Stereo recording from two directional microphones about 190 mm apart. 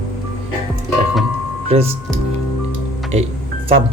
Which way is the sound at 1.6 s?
30° right (ahead or behind).